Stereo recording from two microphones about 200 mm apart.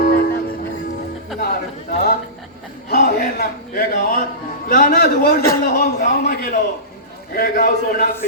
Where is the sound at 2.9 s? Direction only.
45° left (ahead or behind).